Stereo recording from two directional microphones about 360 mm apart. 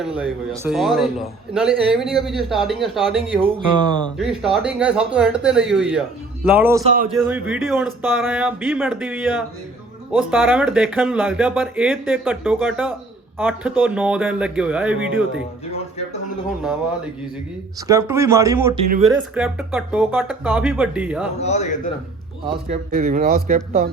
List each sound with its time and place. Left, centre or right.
0.0 s speech: centre
4.0 s speech: centre
17.8 s speech: centre
21.3 s speech: centre
22.5 s speech: right